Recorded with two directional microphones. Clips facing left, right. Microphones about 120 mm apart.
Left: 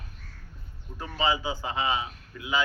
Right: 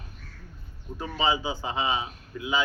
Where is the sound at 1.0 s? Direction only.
20° right (ahead or behind).